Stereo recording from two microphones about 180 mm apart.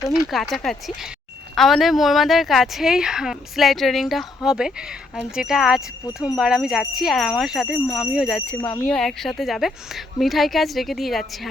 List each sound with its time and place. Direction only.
0.0 s speech: 15° left (ahead or behind)
0.3 s jingle bell: centre (ahead or behind)